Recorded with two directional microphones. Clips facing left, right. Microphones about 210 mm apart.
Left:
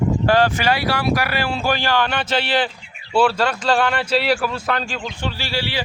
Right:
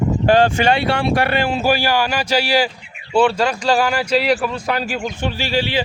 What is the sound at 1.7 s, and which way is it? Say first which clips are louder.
Speech: right 1 dB; 10° right (ahead or behind).